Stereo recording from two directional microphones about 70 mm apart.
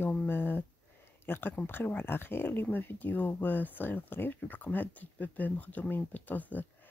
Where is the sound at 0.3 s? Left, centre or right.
Left.